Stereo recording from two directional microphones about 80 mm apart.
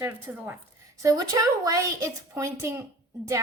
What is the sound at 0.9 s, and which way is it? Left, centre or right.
A woman's voice, right.